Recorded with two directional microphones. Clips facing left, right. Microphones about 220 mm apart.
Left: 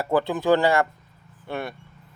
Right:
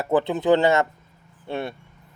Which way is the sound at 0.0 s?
20° right (ahead or behind).